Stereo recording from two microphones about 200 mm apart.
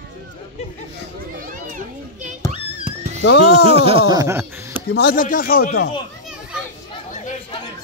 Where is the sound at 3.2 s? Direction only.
60° left (ahead or behind).